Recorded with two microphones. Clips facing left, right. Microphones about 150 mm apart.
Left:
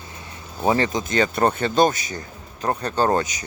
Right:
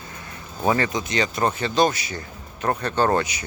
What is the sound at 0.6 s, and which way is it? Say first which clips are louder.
Speech: left 1 dB; 25° left (ahead or behind).